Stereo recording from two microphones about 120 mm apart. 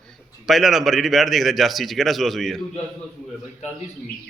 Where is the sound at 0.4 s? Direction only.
Centre (ahead or behind).